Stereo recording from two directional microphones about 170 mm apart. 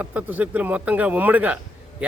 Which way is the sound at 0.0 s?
10° right (ahead or behind).